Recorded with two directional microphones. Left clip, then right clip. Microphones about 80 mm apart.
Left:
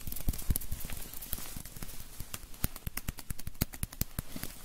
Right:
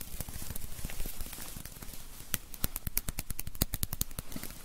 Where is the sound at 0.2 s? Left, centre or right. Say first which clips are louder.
Left 4 dB; right.